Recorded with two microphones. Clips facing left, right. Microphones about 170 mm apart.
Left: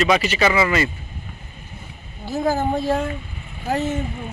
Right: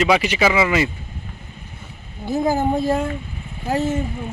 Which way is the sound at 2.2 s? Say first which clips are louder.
Right 2 dB; 15° right (ahead or behind).